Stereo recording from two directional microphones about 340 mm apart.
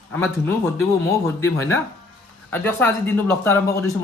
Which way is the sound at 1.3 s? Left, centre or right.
Centre.